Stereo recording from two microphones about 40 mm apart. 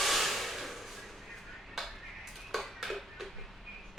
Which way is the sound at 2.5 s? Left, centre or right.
Centre.